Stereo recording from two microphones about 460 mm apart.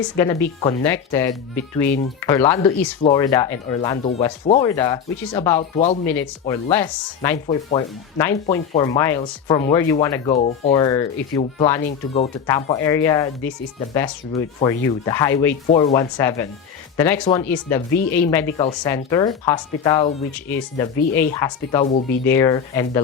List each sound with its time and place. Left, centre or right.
0.4 s speech: centre
20.9 s speech: left
21.3 s speech: centre
22.3 s speech: centre